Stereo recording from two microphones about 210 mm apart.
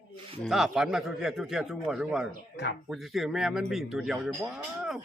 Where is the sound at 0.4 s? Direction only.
Centre (ahead or behind).